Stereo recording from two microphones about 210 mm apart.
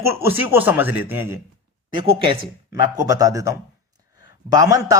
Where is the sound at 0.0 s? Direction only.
10° right (ahead or behind).